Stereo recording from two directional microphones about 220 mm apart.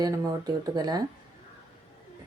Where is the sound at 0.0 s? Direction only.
15° right (ahead or behind).